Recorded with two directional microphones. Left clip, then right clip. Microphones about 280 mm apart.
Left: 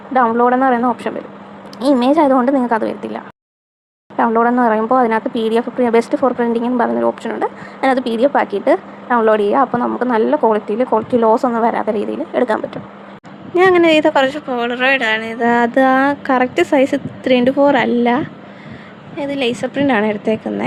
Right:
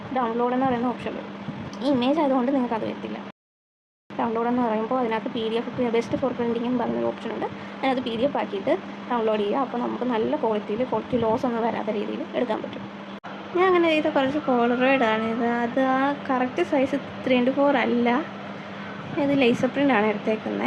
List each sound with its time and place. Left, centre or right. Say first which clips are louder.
0.1 s a woman's voice: left 12 dB; left
4.2 s a woman's voice: left 11 dB; left
19.2 s a woman's voice: left 3 dB; left